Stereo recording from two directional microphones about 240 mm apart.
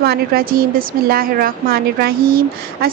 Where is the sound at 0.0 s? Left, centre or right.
Right.